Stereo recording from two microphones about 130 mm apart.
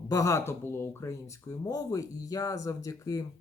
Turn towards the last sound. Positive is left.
turn(degrees=25)  # may be behind; listen again after turning